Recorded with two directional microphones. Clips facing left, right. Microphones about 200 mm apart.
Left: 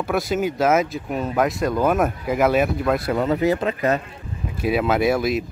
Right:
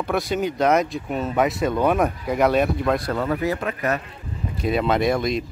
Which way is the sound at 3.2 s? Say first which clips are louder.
Left 4 dB; 20° left (ahead or behind).